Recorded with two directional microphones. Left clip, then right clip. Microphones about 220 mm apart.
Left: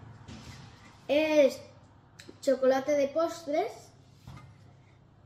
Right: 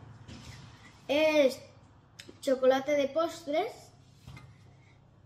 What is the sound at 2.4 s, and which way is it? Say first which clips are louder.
Hands: even; 5° right (ahead or behind).